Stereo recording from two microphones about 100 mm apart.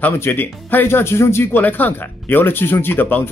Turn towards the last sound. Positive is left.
turn(degrees=20)  # may be behind; listen again after turning